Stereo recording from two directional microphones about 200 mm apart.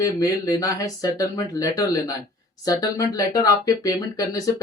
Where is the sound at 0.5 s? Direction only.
15° left (ahead or behind).